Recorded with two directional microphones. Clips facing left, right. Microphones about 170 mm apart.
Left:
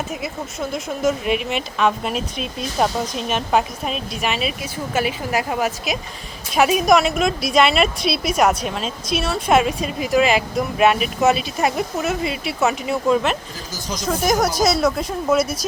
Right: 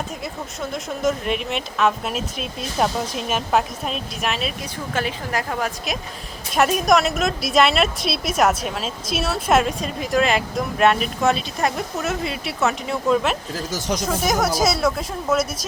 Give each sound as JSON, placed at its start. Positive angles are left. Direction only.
{"t": 0.2, "sound": "a woman's voice", "side_deg": 0}
{"t": 13.7, "sound": "speech", "side_deg": -75}
{"t": 14.3, "sound": "a woman's voice", "side_deg": 0}